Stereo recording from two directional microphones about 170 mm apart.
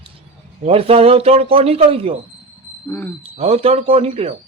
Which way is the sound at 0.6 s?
35° right (ahead or behind).